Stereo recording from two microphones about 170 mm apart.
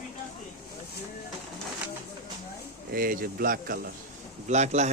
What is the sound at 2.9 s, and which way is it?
Speech, 55° right (ahead or behind).